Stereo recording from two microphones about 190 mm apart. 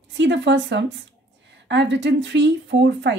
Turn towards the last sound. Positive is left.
turn(degrees=-65)  # may be behind; listen again after turning